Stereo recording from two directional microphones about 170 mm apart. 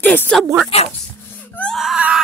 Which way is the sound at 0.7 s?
35° left (ahead or behind).